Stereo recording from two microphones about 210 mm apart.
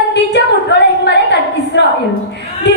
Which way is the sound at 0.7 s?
55° left (ahead or behind).